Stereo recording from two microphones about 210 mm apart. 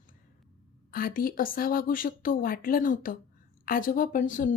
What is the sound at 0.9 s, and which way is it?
Speech, 45° left (ahead or behind).